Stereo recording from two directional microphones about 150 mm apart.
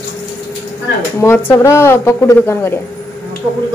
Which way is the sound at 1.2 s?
15° left (ahead or behind).